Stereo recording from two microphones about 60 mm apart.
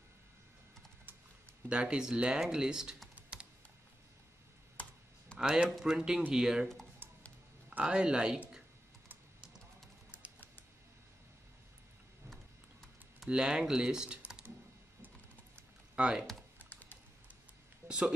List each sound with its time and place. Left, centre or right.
1.7 s speech: centre
5.4 s speech: centre
7.8 s speech: centre
13.3 s speech: centre
16.0 s speech: centre
16.5 s typing: left
17.8 s speech: centre